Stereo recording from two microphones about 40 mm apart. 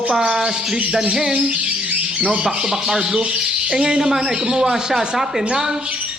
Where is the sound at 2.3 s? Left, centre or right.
Centre.